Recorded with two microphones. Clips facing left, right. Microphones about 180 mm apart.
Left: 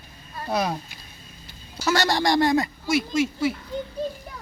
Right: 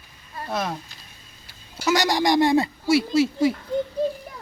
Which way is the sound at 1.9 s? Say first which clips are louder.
Right 1 dB; 15° right (ahead or behind).